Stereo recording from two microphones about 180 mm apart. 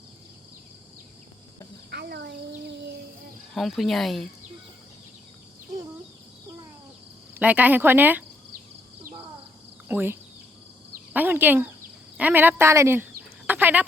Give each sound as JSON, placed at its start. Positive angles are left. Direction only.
{"t": 1.9, "sound": "a child's voice", "side_deg": -65}
{"t": 3.5, "sound": "speech", "side_deg": 0}
{"t": 7.3, "sound": "a woman's voice", "side_deg": -10}
{"t": 9.9, "sound": "a woman's voice", "side_deg": -10}
{"t": 13.5, "sound": "a sound", "side_deg": -10}